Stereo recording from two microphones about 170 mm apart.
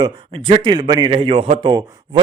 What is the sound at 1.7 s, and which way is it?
Speech, 25° right (ahead or behind).